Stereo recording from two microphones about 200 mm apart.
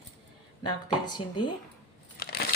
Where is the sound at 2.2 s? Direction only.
50° left (ahead or behind).